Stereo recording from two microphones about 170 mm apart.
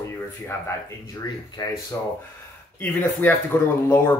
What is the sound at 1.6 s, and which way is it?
Speech, 30° left (ahead or behind).